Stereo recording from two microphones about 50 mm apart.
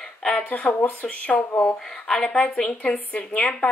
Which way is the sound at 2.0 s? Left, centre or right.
Centre.